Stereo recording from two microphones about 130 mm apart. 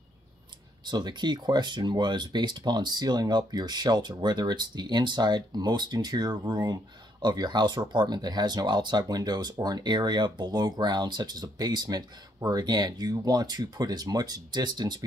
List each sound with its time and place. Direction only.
0.8 s speech: 35° right (ahead or behind)